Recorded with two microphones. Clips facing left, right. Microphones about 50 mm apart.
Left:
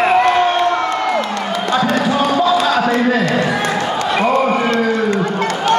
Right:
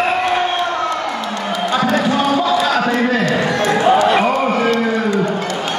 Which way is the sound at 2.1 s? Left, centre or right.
Centre.